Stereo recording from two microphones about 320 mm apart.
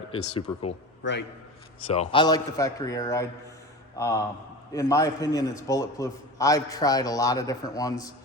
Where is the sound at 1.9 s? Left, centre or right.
Centre.